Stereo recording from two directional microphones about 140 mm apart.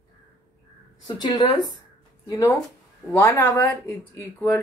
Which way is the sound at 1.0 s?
30° left (ahead or behind).